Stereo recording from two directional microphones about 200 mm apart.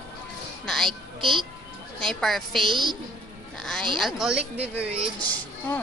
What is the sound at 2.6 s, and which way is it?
Speech, 25° right (ahead or behind).